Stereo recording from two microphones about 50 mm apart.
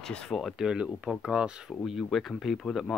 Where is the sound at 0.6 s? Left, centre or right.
Centre.